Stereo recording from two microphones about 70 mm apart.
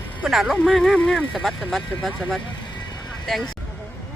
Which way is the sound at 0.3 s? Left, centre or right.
Centre.